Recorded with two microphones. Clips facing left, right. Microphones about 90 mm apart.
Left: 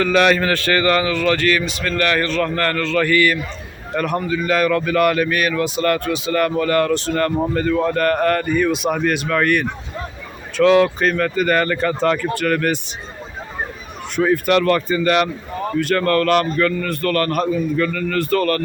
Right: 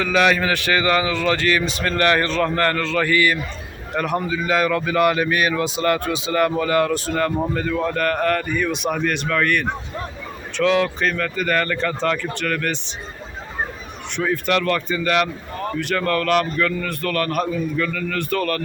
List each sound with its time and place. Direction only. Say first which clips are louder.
0.0 s a man's voice: left 3 dB; 5° right (ahead or behind)
14.2 s a man's voice: left 5 dB; 10° left (ahead or behind)